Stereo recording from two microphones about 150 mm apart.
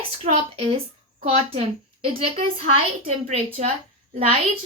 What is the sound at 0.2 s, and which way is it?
Speech, 50° right (ahead or behind).